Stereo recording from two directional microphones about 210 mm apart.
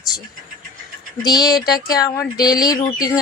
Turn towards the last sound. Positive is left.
turn(degrees=20)  # may be behind; listen again after turning